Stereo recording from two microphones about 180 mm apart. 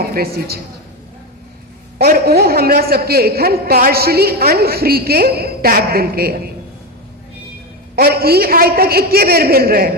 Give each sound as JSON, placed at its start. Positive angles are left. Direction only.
{"t": 0.0, "sound": "a woman's voice", "side_deg": -55}
{"t": 2.0, "sound": "a man's voice", "side_deg": -60}
{"t": 7.9, "sound": "a man's voice", "side_deg": -55}